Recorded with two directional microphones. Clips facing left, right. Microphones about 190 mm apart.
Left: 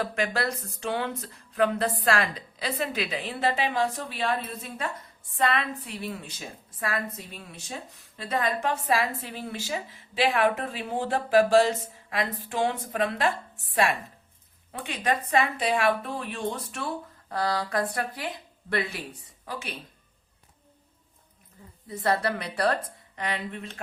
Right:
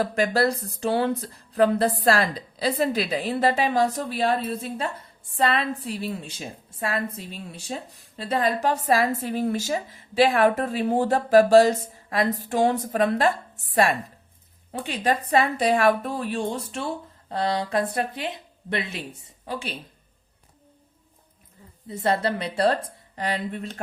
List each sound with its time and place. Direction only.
0.0 s a woman's voice: 40° right (ahead or behind)
14.7 s a woman's voice: 30° right (ahead or behind)
21.8 s a woman's voice: 25° right (ahead or behind)